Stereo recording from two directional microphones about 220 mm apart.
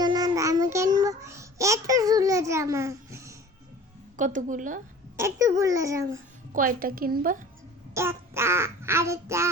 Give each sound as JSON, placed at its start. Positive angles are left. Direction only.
{"t": 0.0, "sound": "child singing", "side_deg": -20}
{"t": 4.2, "sound": "a woman's voice", "side_deg": -35}
{"t": 5.1, "sound": "child singing", "side_deg": -15}
{"t": 6.5, "sound": "a woman's voice", "side_deg": -40}
{"t": 7.9, "sound": "child singing", "side_deg": -10}